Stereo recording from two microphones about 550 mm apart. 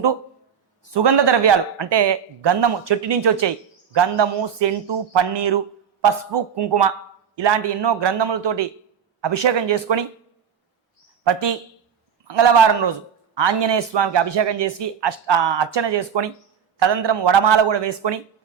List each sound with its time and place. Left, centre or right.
0.9 s speech: right
11.2 s speech: right